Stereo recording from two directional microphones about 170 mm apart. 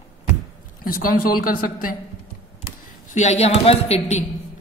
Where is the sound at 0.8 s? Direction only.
55° left (ahead or behind).